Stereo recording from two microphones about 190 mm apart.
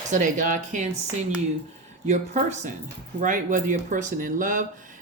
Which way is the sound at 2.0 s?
35° right (ahead or behind).